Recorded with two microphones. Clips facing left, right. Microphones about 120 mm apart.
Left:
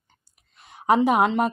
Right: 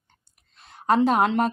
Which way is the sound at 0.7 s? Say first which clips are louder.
Left 1 dB; 15° left (ahead or behind).